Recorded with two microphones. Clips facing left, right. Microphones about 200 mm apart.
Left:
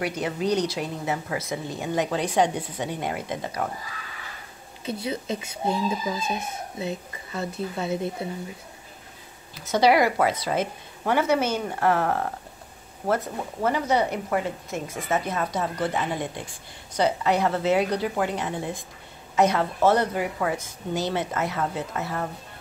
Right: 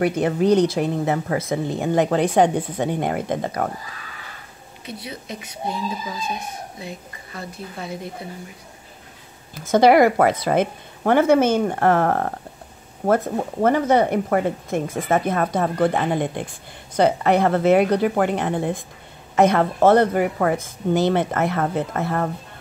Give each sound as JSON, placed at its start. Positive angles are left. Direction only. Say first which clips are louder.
{"t": 0.0, "sound": "speech", "louder": "right 8 dB", "side_deg": -55}
{"t": 4.8, "sound": "speech", "louder": "left 5 dB", "side_deg": 25}
{"t": 9.6, "sound": "a woman's voice", "louder": "right 6 dB", "side_deg": -50}